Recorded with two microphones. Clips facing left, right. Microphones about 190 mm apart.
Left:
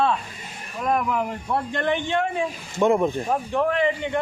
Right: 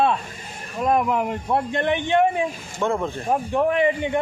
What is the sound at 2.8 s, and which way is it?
Speech, 15° left (ahead or behind).